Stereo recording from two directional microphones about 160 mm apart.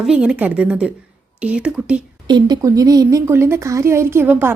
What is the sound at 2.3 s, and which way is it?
A woman's voice, 25° right (ahead or behind).